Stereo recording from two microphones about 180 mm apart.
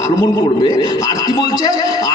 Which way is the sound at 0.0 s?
15° left (ahead or behind).